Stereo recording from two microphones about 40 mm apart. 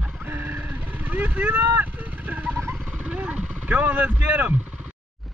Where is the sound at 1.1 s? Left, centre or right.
Right.